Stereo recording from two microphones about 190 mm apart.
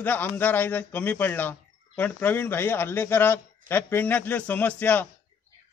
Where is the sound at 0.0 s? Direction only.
10° left (ahead or behind).